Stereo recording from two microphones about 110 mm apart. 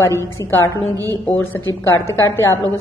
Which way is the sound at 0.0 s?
25° left (ahead or behind).